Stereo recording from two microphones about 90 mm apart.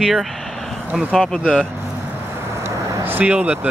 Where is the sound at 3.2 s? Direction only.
15° right (ahead or behind).